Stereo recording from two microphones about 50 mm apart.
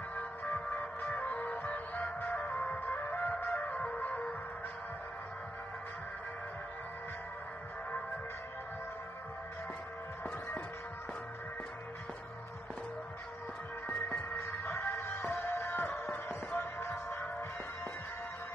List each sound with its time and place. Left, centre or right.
0.1 s music: left
3.6 s music: left
14.0 s music: left
14.4 s music: left
16.3 s music: left